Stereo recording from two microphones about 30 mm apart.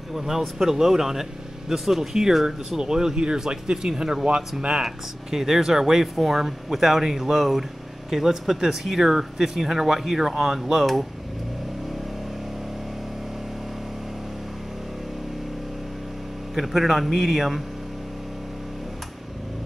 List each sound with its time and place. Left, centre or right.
0.1 s speech: centre; by 4.8 s right
4.8 s speech: centre
16.5 s a man's voice: centre